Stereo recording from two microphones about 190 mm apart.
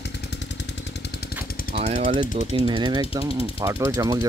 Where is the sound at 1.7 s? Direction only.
35° right (ahead or behind).